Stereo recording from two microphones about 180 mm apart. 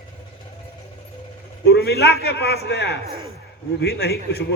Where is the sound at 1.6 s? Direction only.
65° left (ahead or behind).